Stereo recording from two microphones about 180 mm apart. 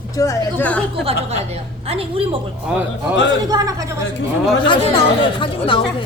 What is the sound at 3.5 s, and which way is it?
Speech, 20° right (ahead or behind).